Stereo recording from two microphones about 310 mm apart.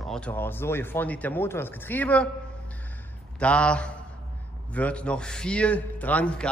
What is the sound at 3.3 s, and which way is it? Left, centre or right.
A man's voice, centre.